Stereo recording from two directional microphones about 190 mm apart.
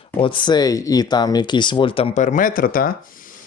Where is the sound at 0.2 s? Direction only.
25° left (ahead or behind).